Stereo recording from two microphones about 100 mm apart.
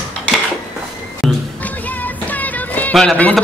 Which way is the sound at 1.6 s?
15° left (ahead or behind).